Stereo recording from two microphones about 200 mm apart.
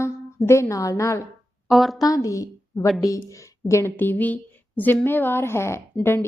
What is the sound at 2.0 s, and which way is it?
A woman's voice, 15° left (ahead or behind).